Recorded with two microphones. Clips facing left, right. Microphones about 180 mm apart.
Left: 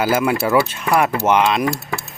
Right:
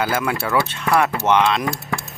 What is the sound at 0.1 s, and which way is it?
Speech, 20° left (ahead or behind).